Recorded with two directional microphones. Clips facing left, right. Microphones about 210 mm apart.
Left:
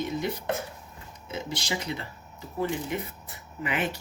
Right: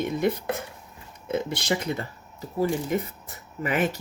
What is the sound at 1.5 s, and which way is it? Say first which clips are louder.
Speech: right 5 dB; 55° right (ahead or behind).